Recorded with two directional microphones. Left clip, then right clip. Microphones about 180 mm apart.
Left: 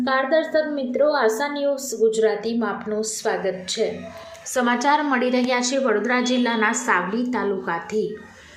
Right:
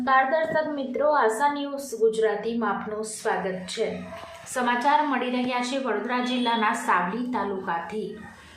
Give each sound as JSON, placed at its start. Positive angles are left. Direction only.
{"t": 0.0, "sound": "a woman's voice", "side_deg": 25}